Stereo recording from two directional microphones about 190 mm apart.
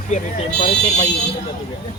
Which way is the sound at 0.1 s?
35° left (ahead or behind).